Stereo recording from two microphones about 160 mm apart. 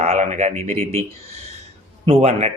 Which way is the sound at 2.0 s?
40° right (ahead or behind).